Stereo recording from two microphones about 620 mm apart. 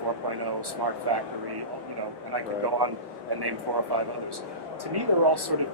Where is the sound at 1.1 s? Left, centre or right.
Right.